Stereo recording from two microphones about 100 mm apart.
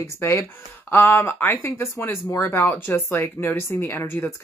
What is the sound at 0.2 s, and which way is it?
Speech, 25° left (ahead or behind).